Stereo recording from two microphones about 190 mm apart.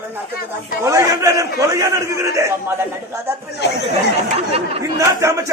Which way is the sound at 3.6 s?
60° left (ahead or behind).